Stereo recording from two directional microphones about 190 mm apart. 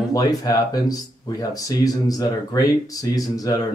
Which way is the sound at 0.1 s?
20° left (ahead or behind).